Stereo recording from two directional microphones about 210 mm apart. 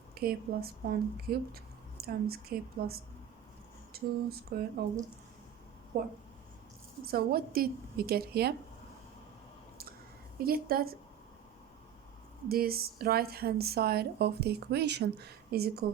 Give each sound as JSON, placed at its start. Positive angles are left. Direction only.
{"t": 0.1, "sound": "a woman's voice", "side_deg": -45}
{"t": 5.9, "sound": "a woman's voice", "side_deg": -45}
{"t": 10.4, "sound": "a woman's voice", "side_deg": -45}
{"t": 12.5, "sound": "a woman's voice", "side_deg": -45}